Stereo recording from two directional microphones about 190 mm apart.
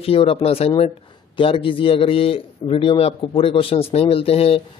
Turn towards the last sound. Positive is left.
turn(degrees=30)  # may be behind; listen again after turning